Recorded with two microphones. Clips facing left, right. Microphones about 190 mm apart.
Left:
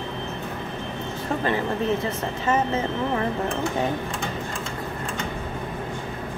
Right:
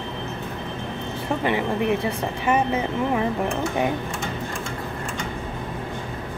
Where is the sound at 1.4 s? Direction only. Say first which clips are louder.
Right 2 dB; 15° right (ahead or behind).